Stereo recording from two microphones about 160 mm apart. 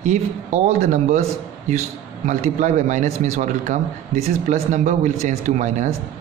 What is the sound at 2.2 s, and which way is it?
Speech, 50° right (ahead or behind).